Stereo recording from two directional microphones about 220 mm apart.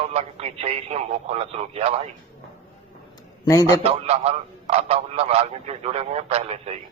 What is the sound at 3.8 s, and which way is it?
A man's voice, 30° right (ahead or behind).